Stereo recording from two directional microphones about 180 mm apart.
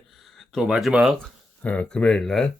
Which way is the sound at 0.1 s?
Centre (ahead or behind).